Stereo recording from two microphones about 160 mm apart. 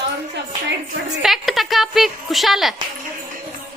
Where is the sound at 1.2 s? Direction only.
Centre (ahead or behind).